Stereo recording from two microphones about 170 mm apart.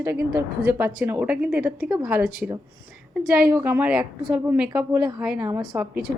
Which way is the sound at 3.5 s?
10° right (ahead or behind).